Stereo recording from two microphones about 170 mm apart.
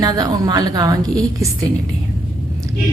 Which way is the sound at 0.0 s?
20° right (ahead or behind).